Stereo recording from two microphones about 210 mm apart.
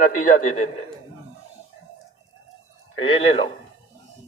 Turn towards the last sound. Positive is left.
turn(degrees=30)  # may be behind; listen again after turning